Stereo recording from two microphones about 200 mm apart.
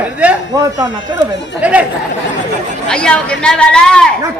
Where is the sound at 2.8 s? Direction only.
5° left (ahead or behind).